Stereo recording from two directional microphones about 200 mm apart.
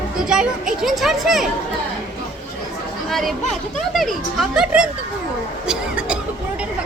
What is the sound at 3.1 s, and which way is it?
Speech, centre (ahead or behind).